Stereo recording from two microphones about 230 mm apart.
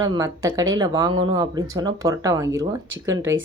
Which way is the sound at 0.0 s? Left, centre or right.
Centre.